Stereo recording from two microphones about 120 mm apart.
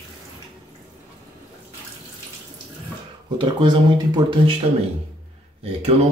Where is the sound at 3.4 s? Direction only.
40° right (ahead or behind).